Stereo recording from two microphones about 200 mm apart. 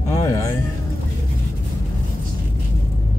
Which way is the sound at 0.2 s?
15° left (ahead or behind).